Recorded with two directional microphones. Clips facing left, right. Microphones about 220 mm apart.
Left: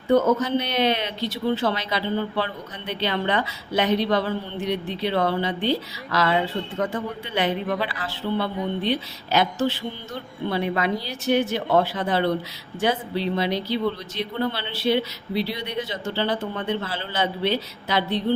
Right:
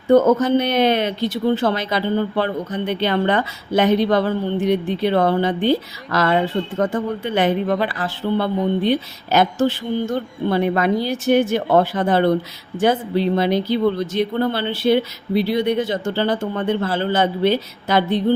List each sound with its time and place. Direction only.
0.1 s speech: 50° right (ahead or behind)